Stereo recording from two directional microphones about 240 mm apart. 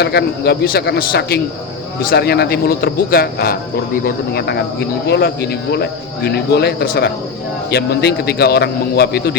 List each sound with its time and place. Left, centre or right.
0.0 s speech: left